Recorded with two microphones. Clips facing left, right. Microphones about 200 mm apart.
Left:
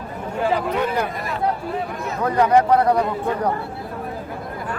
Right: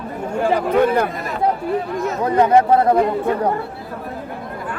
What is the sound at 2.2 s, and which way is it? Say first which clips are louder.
Speech: right 2 dB; 25° right (ahead or behind).